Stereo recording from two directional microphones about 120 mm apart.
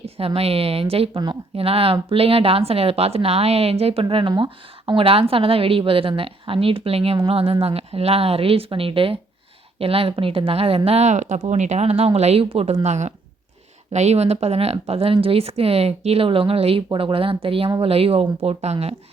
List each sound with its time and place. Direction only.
0.0 s a woman's voice: 55° right (ahead or behind)
12.8 s a woman's voice: 70° right (ahead or behind)